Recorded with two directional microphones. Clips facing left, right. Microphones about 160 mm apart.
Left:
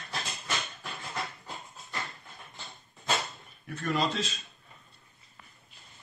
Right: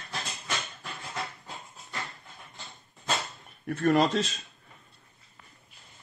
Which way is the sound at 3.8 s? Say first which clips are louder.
Right 7 dB; 55° right (ahead or behind).